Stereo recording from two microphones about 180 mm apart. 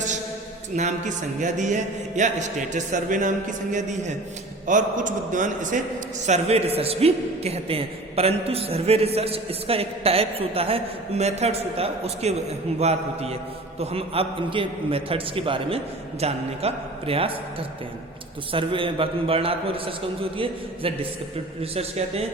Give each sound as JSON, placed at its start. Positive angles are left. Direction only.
{"t": 0.8, "sound": "a man's voice", "side_deg": -40}
{"t": 18.5, "sound": "a man's voice", "side_deg": -30}
{"t": 21.6, "sound": "a man's voice", "side_deg": -35}